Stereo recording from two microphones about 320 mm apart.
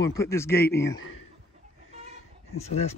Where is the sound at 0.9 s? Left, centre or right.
Left.